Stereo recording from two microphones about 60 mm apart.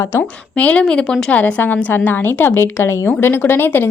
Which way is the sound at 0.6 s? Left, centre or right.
Left.